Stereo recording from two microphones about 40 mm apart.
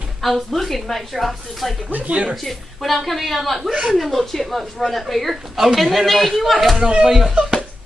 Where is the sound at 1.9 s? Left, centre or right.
Right.